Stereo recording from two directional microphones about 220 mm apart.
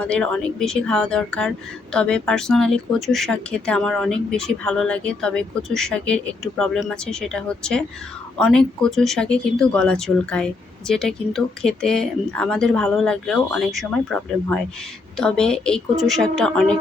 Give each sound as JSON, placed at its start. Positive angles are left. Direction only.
{"t": 0.0, "sound": "speech", "side_deg": 5}